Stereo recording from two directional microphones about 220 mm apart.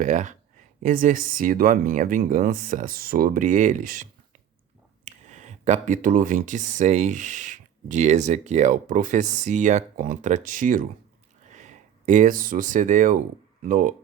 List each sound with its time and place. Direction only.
0.0 s speech: 35° right (ahead or behind)